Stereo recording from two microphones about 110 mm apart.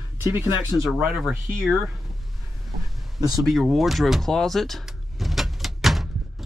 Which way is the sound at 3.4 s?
Centre (ahead or behind).